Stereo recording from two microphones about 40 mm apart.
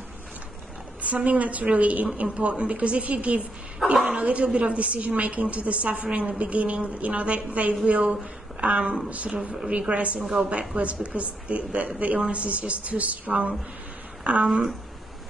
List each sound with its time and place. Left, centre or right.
1.0 s a woman's voice: right
3.9 s speech: centre
4.2 s a woman's voice: right
9.3 s a woman's voice: right
10.2 s speech: centre
10.8 s a woman's voice: right